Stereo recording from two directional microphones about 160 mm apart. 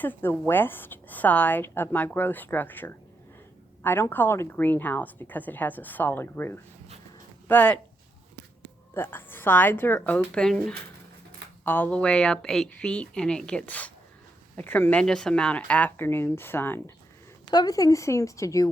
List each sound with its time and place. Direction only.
0.0 s a woman's voice: 10° left (ahead or behind)
9.0 s a woman's voice: 15° left (ahead or behind)
17.5 s speech: 25° left (ahead or behind)